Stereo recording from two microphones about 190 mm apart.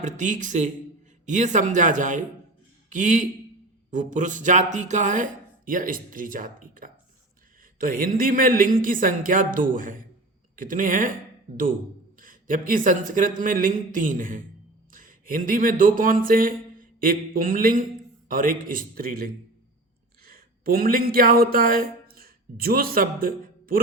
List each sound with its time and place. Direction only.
0.0 s speech: 40° right (ahead or behind)
12.2 s speech: 45° right (ahead or behind)